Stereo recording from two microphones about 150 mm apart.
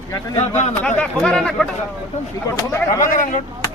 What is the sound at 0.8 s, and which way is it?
Speech, 10° left (ahead or behind).